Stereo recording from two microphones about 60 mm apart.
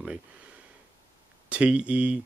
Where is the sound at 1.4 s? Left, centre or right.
Centre.